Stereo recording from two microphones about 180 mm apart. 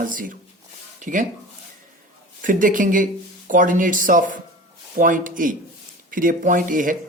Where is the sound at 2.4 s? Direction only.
50° right (ahead or behind).